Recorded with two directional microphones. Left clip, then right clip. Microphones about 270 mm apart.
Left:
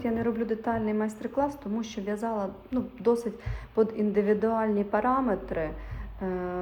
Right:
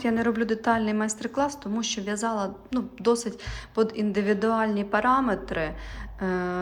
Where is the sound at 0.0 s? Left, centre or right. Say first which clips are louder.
Right 4 dB; centre.